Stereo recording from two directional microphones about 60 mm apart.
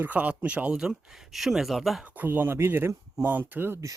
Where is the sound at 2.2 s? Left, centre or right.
Right.